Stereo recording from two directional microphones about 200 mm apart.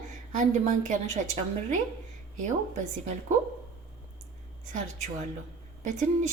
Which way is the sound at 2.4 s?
35° right (ahead or behind).